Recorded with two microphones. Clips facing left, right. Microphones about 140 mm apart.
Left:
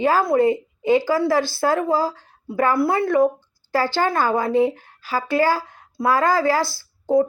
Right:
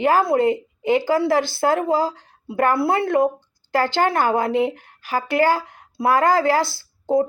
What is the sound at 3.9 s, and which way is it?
Speech, 55° right (ahead or behind).